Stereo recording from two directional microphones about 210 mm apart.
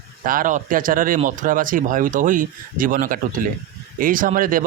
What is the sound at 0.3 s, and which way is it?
A man's voice, 40° right (ahead or behind).